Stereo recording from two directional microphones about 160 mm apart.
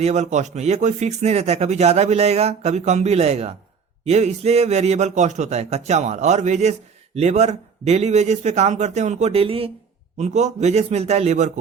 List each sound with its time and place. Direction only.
0.0 s speech: 45° right (ahead or behind)